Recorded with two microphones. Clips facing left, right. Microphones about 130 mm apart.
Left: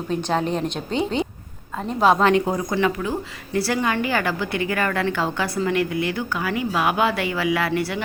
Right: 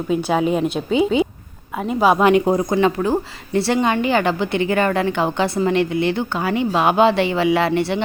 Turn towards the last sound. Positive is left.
turn(degrees=-25)  # may be behind; listen again after turning